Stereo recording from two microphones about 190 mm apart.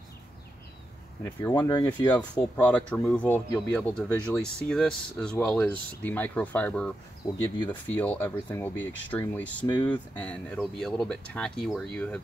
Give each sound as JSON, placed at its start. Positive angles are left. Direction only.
{"t": 1.2, "sound": "speech", "side_deg": 15}
{"t": 2.4, "sound": "speech", "side_deg": 10}
{"t": 9.7, "sound": "speech", "side_deg": 25}
{"t": 10.1, "sound": "speech", "side_deg": 5}